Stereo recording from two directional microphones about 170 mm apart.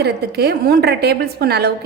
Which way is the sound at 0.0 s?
70° right (ahead or behind).